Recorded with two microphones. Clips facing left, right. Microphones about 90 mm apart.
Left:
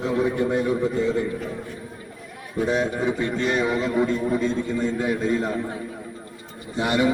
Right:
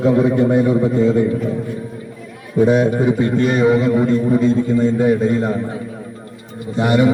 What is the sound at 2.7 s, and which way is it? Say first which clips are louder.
A man's voice: right 6 dB; 15° right (ahead or behind).